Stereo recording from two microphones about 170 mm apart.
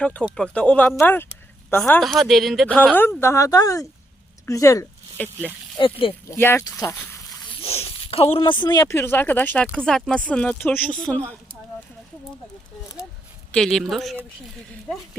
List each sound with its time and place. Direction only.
0.0 s speech: 5° left (ahead or behind)
1.9 s a woman's voice: centre (ahead or behind)
5.7 s speech: 30° left (ahead or behind)
6.3 s speech: 15° left (ahead or behind)
7.6 s speech: 35° left (ahead or behind); by 11.3 s 5° left (ahead or behind)
13.5 s a woman's voice: centre (ahead or behind)